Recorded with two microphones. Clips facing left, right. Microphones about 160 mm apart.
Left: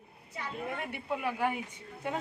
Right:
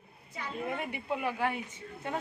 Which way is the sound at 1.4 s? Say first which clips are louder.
Left 1 dB; 10° left (ahead or behind).